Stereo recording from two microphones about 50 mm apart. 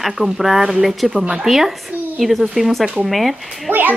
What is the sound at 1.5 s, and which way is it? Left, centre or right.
Speech, centre.